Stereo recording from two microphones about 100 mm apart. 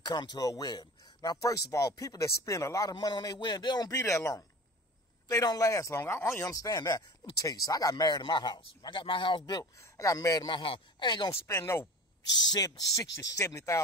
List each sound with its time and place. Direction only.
0.0 s speech: 45° left (ahead or behind)
4.0 s speech: 30° left (ahead or behind); by 9.7 s 50° left (ahead or behind)
9.8 s speech: 35° left (ahead or behind)
10.4 s speech: 55° left (ahead or behind)
11.4 s speech: 25° left (ahead or behind)
12.3 s speech: 40° left (ahead or behind)